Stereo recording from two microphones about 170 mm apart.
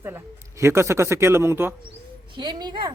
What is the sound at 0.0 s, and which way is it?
A man's voice, 15° right (ahead or behind).